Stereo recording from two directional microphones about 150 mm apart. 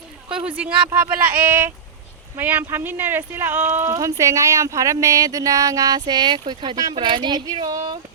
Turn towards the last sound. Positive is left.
turn(degrees=-25)  # may be behind; listen again after turning